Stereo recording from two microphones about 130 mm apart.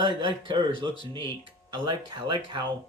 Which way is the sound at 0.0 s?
35° right (ahead or behind).